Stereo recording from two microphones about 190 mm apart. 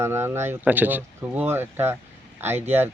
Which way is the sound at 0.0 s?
15° right (ahead or behind).